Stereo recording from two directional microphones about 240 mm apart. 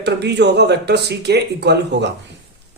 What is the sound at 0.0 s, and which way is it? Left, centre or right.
A man's voice, right.